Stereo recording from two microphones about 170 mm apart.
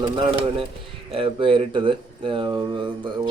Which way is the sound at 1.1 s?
30° right (ahead or behind).